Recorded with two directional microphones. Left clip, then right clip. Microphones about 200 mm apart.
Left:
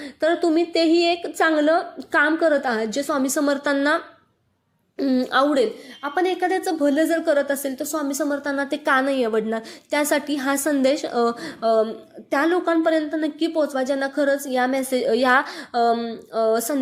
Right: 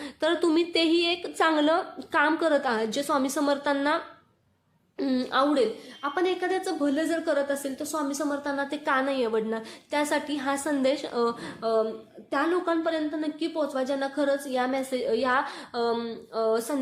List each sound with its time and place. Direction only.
0.0 s a woman's voice: 10° left (ahead or behind)
5.3 s a woman's voice: 25° left (ahead or behind)